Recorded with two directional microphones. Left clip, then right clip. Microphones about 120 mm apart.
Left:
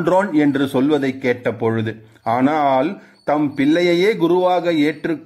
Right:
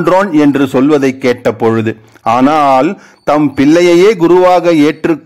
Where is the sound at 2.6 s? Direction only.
45° right (ahead or behind).